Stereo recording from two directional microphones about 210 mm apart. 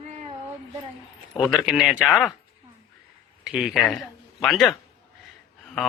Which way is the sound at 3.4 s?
Centre (ahead or behind).